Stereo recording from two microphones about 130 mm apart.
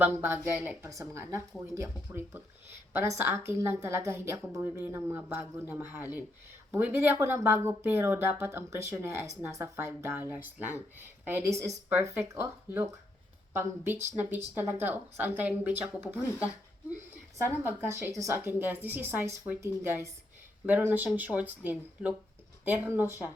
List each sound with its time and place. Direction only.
0.0 s a woman's voice: 15° right (ahead or behind)
17.3 s speech: 15° right (ahead or behind)